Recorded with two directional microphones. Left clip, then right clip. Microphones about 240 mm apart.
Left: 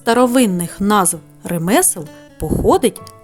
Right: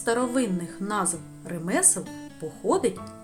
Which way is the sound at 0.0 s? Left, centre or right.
Left.